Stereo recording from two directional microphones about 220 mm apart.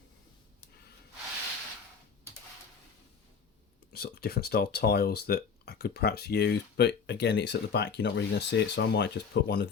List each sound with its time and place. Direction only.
3.9 s speech: 45° left (ahead or behind)